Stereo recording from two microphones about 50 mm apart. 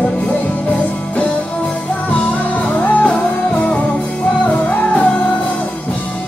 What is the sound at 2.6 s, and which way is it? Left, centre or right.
Music, left.